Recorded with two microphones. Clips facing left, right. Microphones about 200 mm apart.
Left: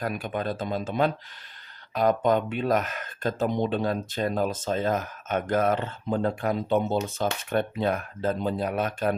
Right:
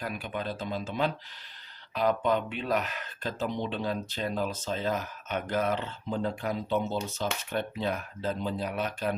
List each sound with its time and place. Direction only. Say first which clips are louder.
0.0 s speech: left 5 dB; 45° left (ahead or behind)